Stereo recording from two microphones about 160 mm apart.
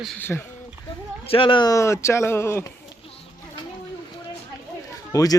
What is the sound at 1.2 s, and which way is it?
Speech, 35° left (ahead or behind).